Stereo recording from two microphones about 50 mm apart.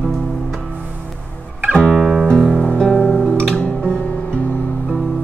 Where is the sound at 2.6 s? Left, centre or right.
Centre.